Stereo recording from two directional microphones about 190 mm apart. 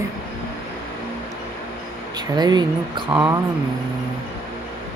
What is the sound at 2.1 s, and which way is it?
Speech, 20° right (ahead or behind).